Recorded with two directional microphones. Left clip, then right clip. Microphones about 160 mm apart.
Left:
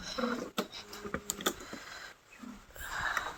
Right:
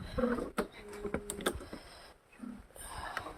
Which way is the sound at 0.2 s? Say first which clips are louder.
Right 2 dB; 60° right (ahead or behind).